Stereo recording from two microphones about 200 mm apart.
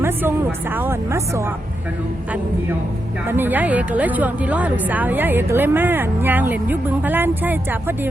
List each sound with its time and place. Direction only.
0.0 s a woman's voice: 10° right (ahead or behind)
3.2 s a woman's voice: 10° right (ahead or behind)